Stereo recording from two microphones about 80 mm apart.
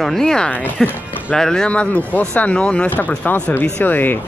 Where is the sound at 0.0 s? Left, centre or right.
Centre.